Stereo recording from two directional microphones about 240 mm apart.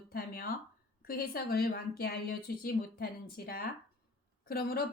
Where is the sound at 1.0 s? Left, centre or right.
Left.